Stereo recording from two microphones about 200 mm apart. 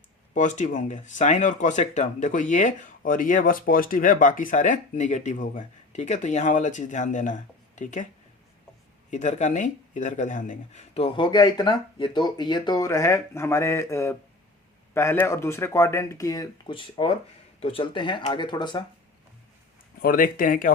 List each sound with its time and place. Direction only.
0.3 s speech: 40° left (ahead or behind)
9.0 s speech: 35° left (ahead or behind)
20.0 s speech: 45° left (ahead or behind)